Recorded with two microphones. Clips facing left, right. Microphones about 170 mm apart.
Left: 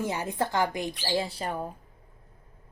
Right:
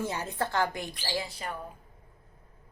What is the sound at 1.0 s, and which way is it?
Speech, 30° left (ahead or behind).